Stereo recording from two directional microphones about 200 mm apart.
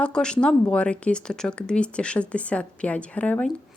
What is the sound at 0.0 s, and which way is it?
Speech, 5° left (ahead or behind).